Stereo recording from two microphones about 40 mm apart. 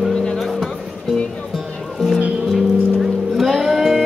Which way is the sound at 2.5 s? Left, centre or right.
Centre.